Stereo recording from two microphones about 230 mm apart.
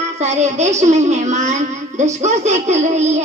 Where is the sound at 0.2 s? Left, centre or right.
Right.